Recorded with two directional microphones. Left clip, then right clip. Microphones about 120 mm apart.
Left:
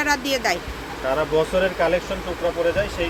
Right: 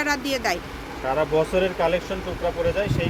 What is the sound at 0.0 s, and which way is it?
Speech, 5° right (ahead or behind).